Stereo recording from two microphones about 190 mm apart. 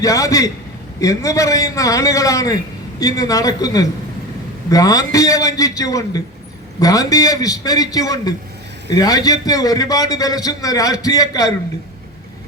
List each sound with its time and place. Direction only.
0.0 s a man's voice: 15° left (ahead or behind)